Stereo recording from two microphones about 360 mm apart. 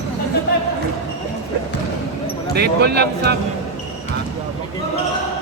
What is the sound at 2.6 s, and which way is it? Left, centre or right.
Speech, right.